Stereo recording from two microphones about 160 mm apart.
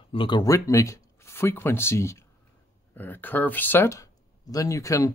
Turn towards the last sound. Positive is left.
turn(degrees=20)  # may be behind; listen again after turning